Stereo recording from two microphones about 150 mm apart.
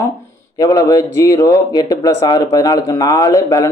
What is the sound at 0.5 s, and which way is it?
Speech, 25° left (ahead or behind).